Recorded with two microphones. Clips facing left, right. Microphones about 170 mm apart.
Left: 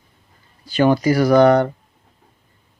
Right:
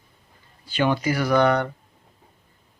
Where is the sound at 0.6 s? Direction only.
40° left (ahead or behind).